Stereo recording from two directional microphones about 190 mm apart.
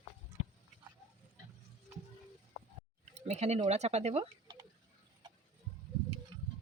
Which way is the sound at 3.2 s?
35° right (ahead or behind).